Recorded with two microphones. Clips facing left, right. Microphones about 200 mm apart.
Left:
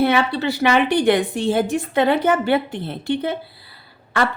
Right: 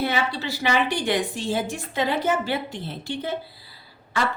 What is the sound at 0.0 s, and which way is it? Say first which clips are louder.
A woman's voice: left 7 dB; 60° left (ahead or behind).